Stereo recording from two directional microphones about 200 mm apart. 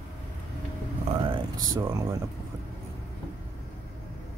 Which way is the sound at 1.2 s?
25° right (ahead or behind).